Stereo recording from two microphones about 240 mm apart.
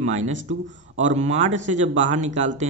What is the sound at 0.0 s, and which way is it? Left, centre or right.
Speech, right.